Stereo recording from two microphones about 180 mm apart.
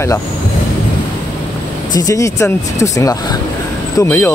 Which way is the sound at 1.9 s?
20° left (ahead or behind).